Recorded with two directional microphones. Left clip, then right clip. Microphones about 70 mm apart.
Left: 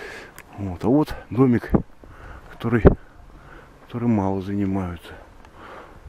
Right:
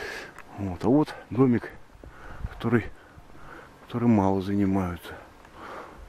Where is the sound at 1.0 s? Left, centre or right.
Centre.